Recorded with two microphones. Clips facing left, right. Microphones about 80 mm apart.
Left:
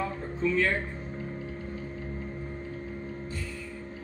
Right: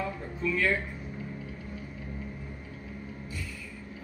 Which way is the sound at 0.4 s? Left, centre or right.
Left.